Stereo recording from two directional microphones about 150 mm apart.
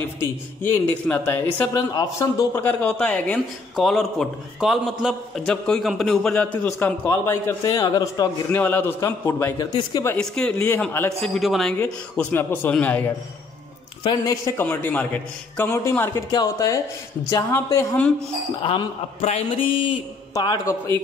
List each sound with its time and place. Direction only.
0.2 s a man's voice: 10° left (ahead or behind)
8.5 s speech: 10° left (ahead or behind)
10.1 s speech: 5° left (ahead or behind)
11.1 s a man's voice: centre (ahead or behind)
11.8 s speech: 10° left (ahead or behind)
14.0 s speech: 20° left (ahead or behind)
18.6 s a man's voice: 35° left (ahead or behind)
20.3 s speech: 25° left (ahead or behind)